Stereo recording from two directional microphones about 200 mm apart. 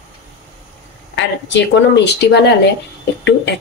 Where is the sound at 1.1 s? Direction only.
65° left (ahead or behind).